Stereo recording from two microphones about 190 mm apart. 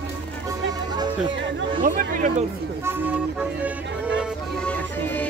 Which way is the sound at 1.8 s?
45° right (ahead or behind).